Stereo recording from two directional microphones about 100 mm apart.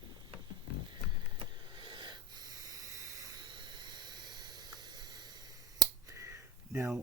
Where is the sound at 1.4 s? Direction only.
55° right (ahead or behind); by 3.4 s 35° right (ahead or behind).